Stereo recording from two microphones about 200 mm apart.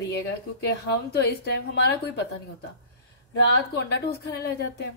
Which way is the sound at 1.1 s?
55° left (ahead or behind).